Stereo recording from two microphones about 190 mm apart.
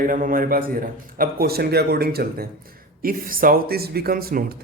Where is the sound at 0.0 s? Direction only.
45° right (ahead or behind).